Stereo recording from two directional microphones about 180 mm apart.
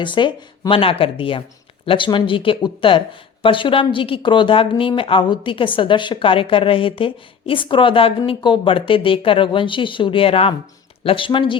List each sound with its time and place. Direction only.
0.0 s a woman's voice: 25° left (ahead or behind)